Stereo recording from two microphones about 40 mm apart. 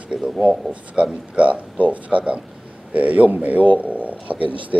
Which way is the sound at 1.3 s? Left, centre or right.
Right.